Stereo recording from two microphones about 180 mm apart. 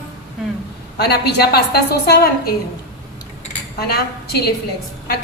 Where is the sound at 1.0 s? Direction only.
65° left (ahead or behind).